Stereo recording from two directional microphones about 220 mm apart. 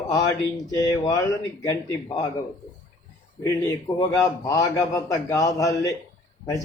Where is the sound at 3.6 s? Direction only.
15° left (ahead or behind).